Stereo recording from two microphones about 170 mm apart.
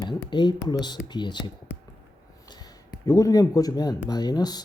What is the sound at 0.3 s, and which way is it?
Speech, 25° left (ahead or behind).